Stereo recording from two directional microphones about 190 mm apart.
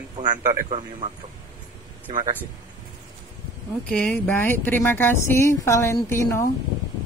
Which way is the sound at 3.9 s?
5° left (ahead or behind).